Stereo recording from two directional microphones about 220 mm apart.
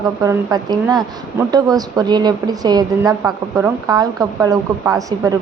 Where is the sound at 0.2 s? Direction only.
15° right (ahead or behind).